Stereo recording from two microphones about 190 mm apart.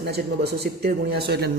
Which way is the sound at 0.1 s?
60° right (ahead or behind).